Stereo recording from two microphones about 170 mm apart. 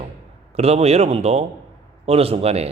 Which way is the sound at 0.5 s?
40° right (ahead or behind).